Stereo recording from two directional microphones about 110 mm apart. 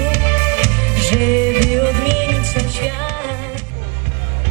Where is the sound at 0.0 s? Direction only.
20° right (ahead or behind).